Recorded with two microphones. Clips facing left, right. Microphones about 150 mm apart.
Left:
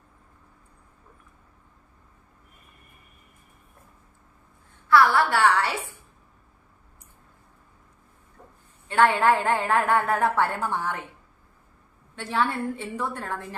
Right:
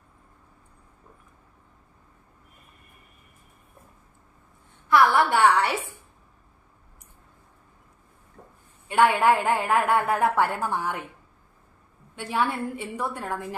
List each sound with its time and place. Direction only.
4.9 s a woman's voice: 20° right (ahead or behind)
8.9 s a woman's voice: 10° right (ahead or behind)
12.1 s a woman's voice: 15° right (ahead or behind)